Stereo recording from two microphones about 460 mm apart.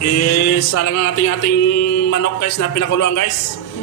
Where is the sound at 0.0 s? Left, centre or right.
Left.